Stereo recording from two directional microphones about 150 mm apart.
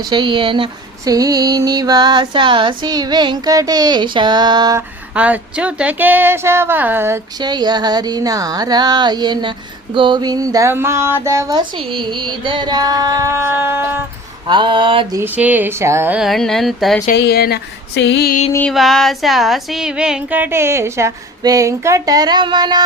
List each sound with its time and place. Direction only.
0.0 s speech: 30° right (ahead or behind)
1.0 s speech: 25° right (ahead or behind)
5.1 s music: 10° right (ahead or behind)
7.3 s speech: 30° right (ahead or behind)
11.7 s speech: 35° right (ahead or behind); by 14.0 s 15° right (ahead or behind)
14.4 s speech: 30° right (ahead or behind)
15.1 s music: 15° right (ahead or behind)
16.1 s speech: centre (ahead or behind)
17.1 s speech: 90° left
18.7 s music: centre (ahead or behind); by 22.8 s 30° right (ahead or behind)